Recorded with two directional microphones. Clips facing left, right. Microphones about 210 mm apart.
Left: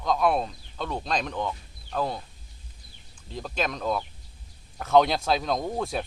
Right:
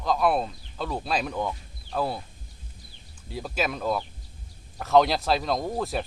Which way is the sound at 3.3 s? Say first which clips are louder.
Right 1 dB; 10° right (ahead or behind).